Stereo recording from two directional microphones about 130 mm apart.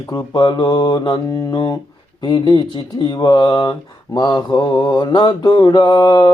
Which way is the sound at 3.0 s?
35° left (ahead or behind).